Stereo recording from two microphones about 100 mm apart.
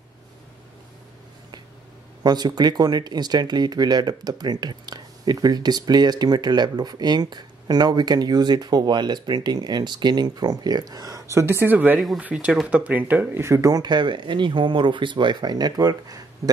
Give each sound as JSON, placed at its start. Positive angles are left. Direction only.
{"t": 2.2, "sound": "speech", "side_deg": -45}